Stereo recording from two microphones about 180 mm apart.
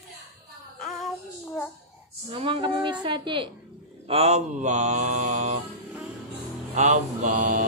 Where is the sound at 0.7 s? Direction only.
Centre (ahead or behind).